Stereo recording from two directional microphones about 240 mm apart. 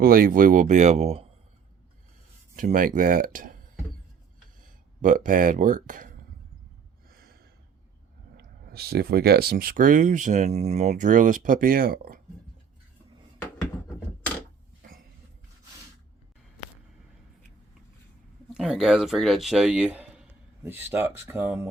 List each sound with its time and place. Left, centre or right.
0.0 s speech: right
2.6 s speech: right
4.6 s speech: right
7.1 s a sound: right
8.6 s speech: right
18.5 s speech: centre